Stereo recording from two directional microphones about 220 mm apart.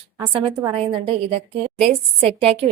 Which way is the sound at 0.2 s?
20° right (ahead or behind).